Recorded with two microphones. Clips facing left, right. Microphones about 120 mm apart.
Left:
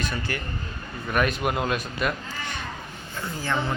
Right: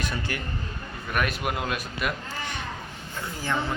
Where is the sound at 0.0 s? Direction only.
15° right (ahead or behind).